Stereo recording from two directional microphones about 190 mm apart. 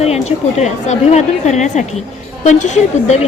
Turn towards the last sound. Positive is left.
turn(degrees=40)  # may be behind; listen again after turning